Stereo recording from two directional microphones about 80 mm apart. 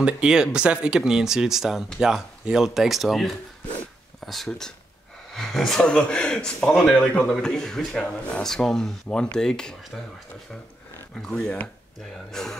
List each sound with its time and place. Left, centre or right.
0.0 s speech: centre
11.1 s speech: centre
11.4 s speech: centre
12.3 s speech: centre